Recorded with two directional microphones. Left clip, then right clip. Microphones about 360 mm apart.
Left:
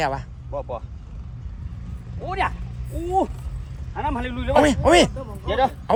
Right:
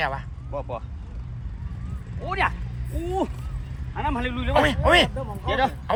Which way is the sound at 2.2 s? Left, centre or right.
Left.